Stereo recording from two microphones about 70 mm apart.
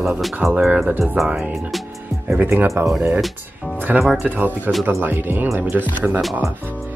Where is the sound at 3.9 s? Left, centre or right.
Right.